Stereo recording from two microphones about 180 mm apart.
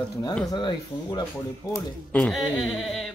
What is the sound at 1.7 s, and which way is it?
Speech, 5° left (ahead or behind).